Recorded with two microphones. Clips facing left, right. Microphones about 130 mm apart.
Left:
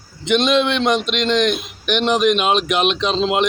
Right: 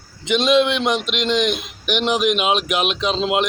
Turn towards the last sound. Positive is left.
turn(degrees=-5)  # may be behind; listen again after turning